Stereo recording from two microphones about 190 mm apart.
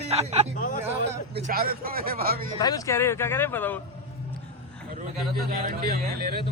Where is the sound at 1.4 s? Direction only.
50° right (ahead or behind).